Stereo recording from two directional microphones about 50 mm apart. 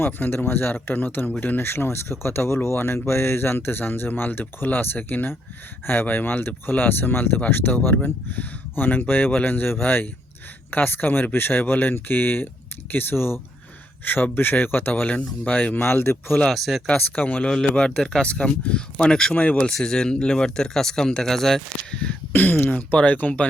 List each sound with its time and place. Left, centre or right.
0.0 s speech: left
14.0 s speech: left
15.1 s speech: left
15.8 s speech: left
16.5 s speech: centre
17.0 s speech: left; by 19.3 s centre
19.3 s speech: left
19.7 s speech: centre
22.3 s speech: left
23.0 s speech: left